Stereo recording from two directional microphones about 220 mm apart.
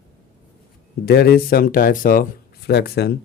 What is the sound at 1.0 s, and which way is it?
Speech, 45° left (ahead or behind).